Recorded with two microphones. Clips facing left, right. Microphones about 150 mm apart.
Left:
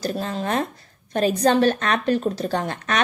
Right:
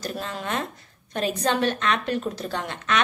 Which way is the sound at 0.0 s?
35° left (ahead or behind).